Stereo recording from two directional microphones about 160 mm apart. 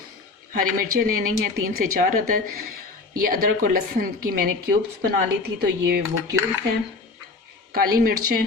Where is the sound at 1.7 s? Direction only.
60° right (ahead or behind); by 5.5 s 75° right (ahead or behind).